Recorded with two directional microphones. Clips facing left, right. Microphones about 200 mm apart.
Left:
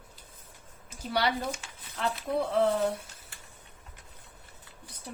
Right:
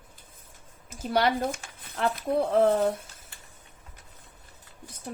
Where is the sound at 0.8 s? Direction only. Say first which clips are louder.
Right 4 dB; 50° right (ahead or behind).